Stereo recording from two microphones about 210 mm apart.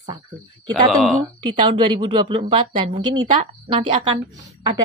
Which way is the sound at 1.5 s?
25° right (ahead or behind).